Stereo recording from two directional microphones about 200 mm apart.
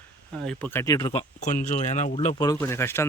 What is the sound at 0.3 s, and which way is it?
Speech, 5° left (ahead or behind).